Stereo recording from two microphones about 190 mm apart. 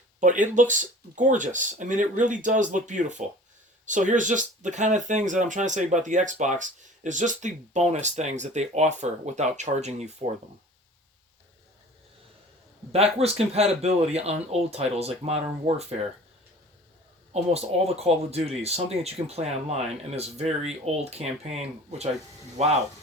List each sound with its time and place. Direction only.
0.2 s speech: 40° right (ahead or behind)
12.9 s speech: 30° right (ahead or behind)
17.5 s speech: 35° right (ahead or behind)